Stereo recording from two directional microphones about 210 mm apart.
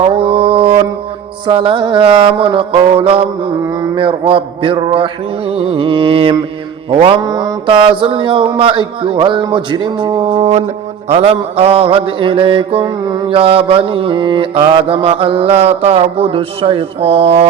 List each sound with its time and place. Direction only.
0.0 s mantra: 25° right (ahead or behind)